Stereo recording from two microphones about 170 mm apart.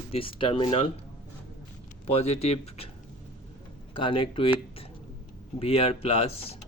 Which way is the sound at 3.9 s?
30° left (ahead or behind).